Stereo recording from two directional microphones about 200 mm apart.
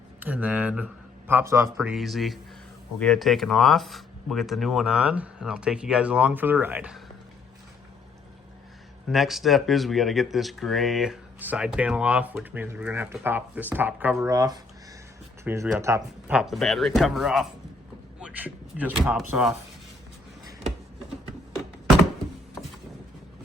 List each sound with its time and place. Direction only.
0.2 s speech: 10° right (ahead or behind)
1.7 s speech: centre (ahead or behind)
9.0 s speech: centre (ahead or behind)
14.3 s speech: 20° right (ahead or behind)
15.4 s speech: 5° right (ahead or behind)
16.4 s speech: centre (ahead or behind)